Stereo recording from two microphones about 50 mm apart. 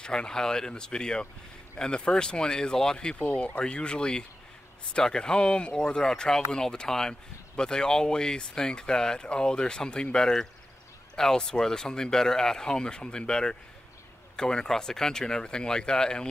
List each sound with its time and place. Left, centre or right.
0.0 s speech: centre